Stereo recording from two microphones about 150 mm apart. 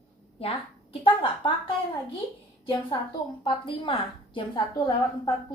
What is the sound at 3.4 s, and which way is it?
A woman's voice, 35° left (ahead or behind).